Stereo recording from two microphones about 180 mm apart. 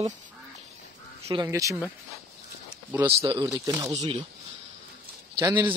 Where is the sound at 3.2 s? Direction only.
30° right (ahead or behind).